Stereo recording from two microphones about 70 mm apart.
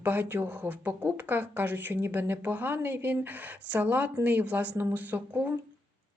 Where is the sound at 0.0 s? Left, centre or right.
Right.